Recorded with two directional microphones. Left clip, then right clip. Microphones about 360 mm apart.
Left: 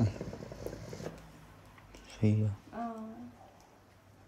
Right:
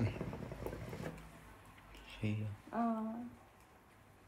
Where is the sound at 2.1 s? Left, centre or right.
Centre.